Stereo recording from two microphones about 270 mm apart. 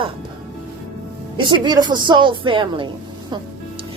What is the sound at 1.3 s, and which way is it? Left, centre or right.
Speech, centre.